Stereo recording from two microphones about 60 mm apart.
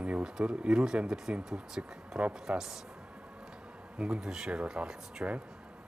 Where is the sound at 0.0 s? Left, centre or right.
Centre.